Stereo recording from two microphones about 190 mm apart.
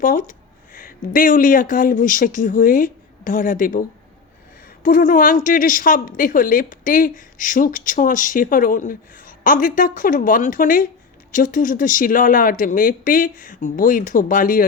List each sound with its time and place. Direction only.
0.0 s speech: 45° left (ahead or behind)